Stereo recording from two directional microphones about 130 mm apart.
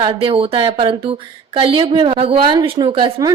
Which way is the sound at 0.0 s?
45° right (ahead or behind).